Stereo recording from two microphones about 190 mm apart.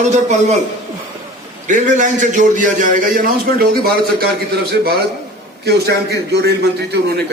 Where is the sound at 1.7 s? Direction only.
40° right (ahead or behind); by 7.2 s 60° right (ahead or behind).